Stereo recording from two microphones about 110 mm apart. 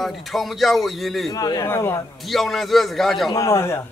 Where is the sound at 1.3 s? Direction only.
35° left (ahead or behind).